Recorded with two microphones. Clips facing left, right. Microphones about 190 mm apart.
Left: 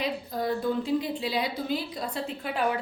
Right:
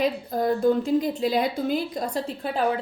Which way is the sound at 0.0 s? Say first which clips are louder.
Right 6 dB; 50° right (ahead or behind).